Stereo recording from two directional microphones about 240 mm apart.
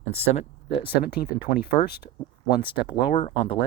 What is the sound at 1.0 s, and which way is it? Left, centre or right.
Speech, left.